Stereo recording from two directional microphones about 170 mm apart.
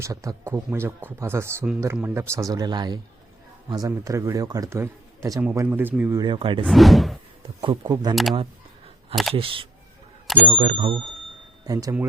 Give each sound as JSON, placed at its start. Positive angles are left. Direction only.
{"t": 0.0, "sound": "a man's voice", "side_deg": -20}
{"t": 6.1, "sound": "a man's voice", "side_deg": -25}
{"t": 6.7, "sound": "speech", "side_deg": 0}
{"t": 7.6, "sound": "a man's voice", "side_deg": -25}
{"t": 8.1, "sound": "speech", "side_deg": 0}
{"t": 9.3, "sound": "speech", "side_deg": -30}